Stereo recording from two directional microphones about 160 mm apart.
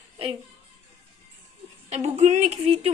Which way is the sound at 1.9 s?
45° right (ahead or behind).